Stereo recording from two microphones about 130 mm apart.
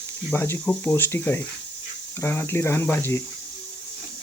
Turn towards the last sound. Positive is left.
turn(degrees=20)  # may be behind; listen again after turning